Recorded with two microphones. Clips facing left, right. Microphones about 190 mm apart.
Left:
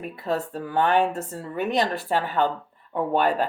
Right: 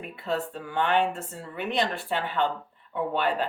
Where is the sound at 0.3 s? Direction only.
40° left (ahead or behind).